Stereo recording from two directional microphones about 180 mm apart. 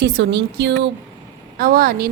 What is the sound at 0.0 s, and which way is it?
Speech, 75° right (ahead or behind).